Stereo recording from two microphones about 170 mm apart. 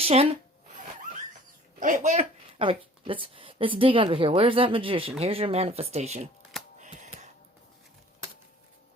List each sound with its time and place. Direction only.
0.0 s speech: 35° right (ahead or behind)
1.8 s speech: 50° right (ahead or behind)
2.6 s a woman's voice: 30° right (ahead or behind)
6.7 s a sound: 45° right (ahead or behind)